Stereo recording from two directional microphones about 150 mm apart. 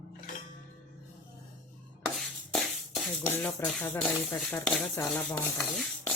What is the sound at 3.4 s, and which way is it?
Speech, 10° left (ahead or behind).